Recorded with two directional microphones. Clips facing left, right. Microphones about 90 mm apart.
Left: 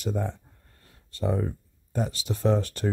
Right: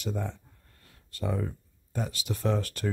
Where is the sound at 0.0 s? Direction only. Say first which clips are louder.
Left 4 dB; 40° left (ahead or behind).